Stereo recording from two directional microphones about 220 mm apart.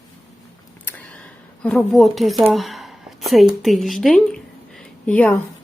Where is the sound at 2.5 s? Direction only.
Centre (ahead or behind).